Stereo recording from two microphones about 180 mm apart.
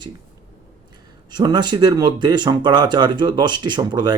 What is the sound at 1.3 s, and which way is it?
Speech, 20° right (ahead or behind).